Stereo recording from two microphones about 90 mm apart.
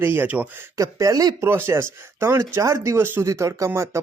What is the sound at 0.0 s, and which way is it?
Speech, 25° right (ahead or behind).